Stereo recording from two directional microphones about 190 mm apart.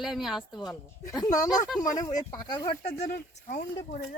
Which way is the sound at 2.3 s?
20° left (ahead or behind).